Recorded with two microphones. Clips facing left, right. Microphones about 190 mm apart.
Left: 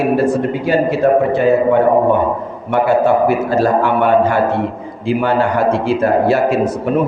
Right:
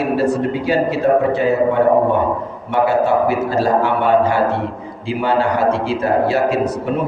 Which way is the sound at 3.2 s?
50° left (ahead or behind).